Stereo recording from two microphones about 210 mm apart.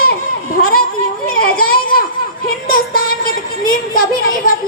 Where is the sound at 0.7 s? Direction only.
45° left (ahead or behind).